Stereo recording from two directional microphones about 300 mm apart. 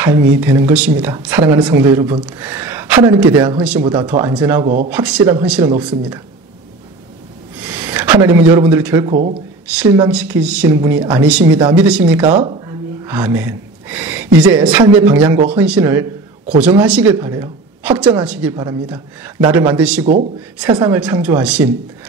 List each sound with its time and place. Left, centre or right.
0.0 s speech: centre
7.6 s a sound: centre
8.5 s speech: centre
9.1 s speech: right
9.7 s speech: centre
20.1 s speech: right
20.8 s speech: centre